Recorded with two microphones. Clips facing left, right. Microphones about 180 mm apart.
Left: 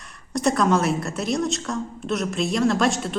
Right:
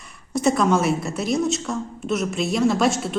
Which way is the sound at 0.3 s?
Centre (ahead or behind).